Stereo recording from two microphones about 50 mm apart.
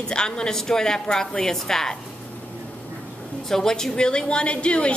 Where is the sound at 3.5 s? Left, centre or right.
Centre.